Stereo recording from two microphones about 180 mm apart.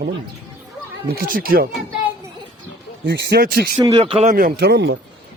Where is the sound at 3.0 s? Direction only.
70° right (ahead or behind).